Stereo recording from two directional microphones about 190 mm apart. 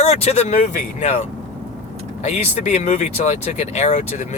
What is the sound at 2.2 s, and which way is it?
Speech, 35° left (ahead or behind).